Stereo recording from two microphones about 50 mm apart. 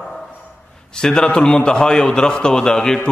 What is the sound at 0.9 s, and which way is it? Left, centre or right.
A man's voice, centre.